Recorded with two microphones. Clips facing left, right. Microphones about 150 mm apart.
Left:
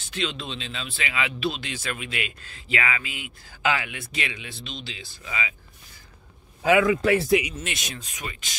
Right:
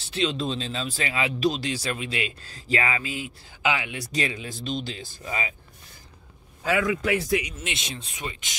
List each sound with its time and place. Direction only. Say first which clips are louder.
0.0 s speech: right 5 dB; 35° right (ahead or behind)
3.6 s speech: left 1 dB; 15° right (ahead or behind)
3.9 s speech: right 4 dB; 35° right (ahead or behind)
6.9 s speech: left 4 dB; 35° left (ahead or behind)
7.6 s speech: even; 25° right (ahead or behind)